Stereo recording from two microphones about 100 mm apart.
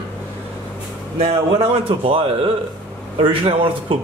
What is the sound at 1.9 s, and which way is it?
Speech, 70° right (ahead or behind).